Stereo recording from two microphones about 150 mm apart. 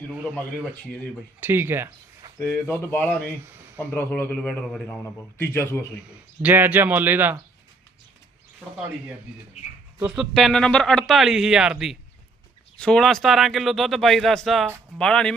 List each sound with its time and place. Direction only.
1.4 s speech: 15° right (ahead or behind)
2.4 s a man's voice: 15° left (ahead or behind)
6.1 s speech: 10° right (ahead or behind)
10.1 s speech: centre (ahead or behind)